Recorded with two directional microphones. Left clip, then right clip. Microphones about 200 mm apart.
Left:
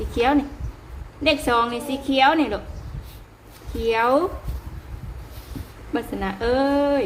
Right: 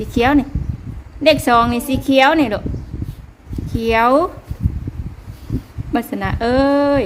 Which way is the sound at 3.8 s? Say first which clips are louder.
Right 6 dB; 60° right (ahead or behind).